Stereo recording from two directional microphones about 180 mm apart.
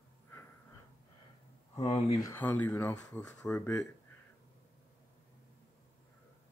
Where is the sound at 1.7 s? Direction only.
30° left (ahead or behind).